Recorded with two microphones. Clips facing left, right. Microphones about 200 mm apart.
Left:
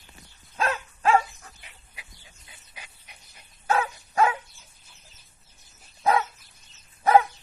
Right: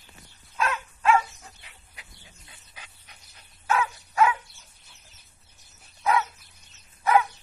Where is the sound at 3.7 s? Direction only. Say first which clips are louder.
Left 1 dB; 35° left (ahead or behind).